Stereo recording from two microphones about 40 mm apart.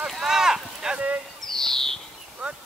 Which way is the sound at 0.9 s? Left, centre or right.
Right.